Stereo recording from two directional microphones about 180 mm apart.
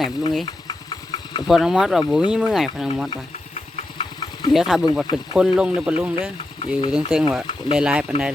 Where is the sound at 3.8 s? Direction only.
30° left (ahead or behind).